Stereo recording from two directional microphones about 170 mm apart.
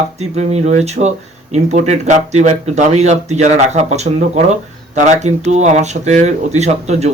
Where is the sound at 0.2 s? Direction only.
40° right (ahead or behind).